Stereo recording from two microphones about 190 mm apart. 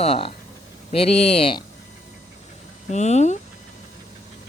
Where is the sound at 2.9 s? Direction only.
35° left (ahead or behind).